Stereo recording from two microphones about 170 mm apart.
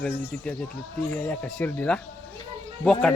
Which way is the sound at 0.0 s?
5° left (ahead or behind).